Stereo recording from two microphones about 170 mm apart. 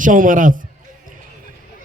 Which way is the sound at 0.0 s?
50° right (ahead or behind).